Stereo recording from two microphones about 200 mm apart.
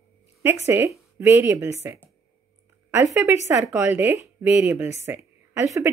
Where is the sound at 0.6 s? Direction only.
15° right (ahead or behind).